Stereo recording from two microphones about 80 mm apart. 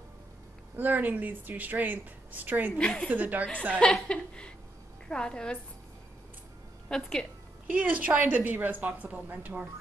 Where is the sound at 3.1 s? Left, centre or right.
Right.